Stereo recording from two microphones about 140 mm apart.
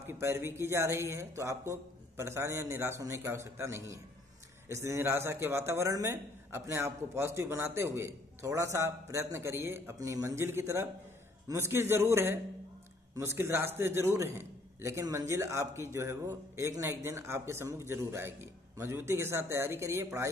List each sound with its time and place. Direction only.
0.0 s a man's voice: 20° right (ahead or behind)